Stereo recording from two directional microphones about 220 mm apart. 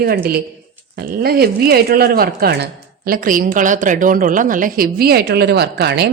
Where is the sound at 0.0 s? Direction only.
45° right (ahead or behind).